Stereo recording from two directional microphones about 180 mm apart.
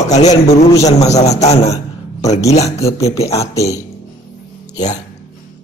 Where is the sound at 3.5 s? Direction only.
20° left (ahead or behind).